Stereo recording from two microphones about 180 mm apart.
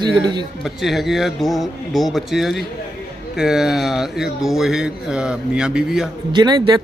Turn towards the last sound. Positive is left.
turn(degrees=-25)  # may be behind; listen again after turning